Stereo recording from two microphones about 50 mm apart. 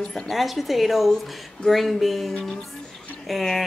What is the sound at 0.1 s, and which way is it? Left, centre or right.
Speech, centre.